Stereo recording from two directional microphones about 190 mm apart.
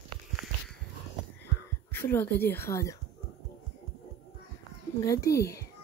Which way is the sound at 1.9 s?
10° left (ahead or behind).